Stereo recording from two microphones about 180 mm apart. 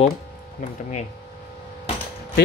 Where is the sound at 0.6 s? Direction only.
40° left (ahead or behind).